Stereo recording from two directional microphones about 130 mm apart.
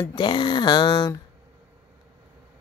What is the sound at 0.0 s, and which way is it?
Speech, 35° left (ahead or behind).